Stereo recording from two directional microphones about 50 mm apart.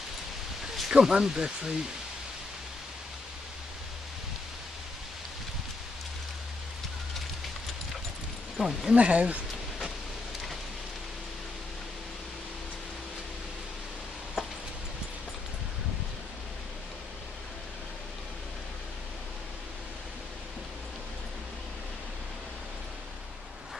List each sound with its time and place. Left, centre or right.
0.7 s speech: centre
8.5 s speech: centre
8.9 s speech: right